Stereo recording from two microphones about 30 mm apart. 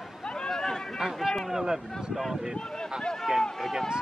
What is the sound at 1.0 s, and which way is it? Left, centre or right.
Speech, centre.